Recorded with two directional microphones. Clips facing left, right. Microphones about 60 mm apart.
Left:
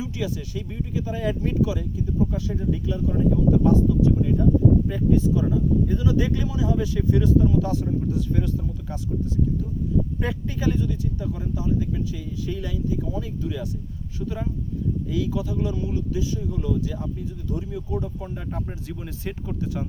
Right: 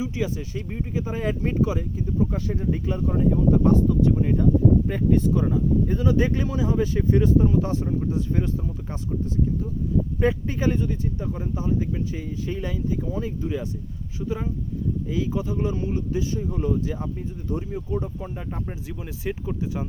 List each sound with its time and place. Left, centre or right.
0.0 s speech: right
10.2 s speech: right
14.2 s speech: centre
15.1 s speech: right
18.3 s speech: centre